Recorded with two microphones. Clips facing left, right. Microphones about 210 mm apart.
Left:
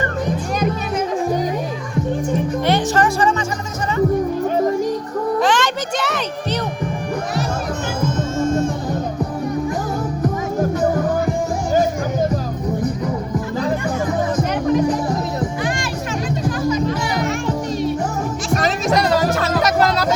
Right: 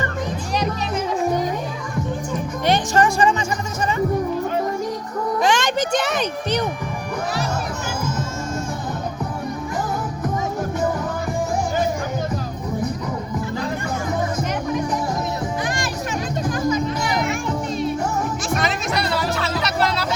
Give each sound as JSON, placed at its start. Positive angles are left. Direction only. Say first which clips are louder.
{"t": 2.6, "sound": "music", "louder": "right 1 dB", "side_deg": -15}
{"t": 5.4, "sound": "music", "louder": "right 2 dB", "side_deg": -15}
{"t": 18.5, "sound": "music", "louder": "left 7 dB", "side_deg": 40}